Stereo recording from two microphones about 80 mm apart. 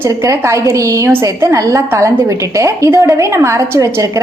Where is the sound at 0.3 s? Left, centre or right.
Right.